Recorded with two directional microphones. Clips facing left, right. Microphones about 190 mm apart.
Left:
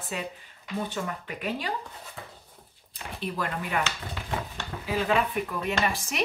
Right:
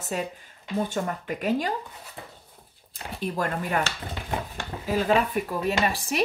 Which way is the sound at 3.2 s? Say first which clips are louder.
Right 4 dB; 45° right (ahead or behind).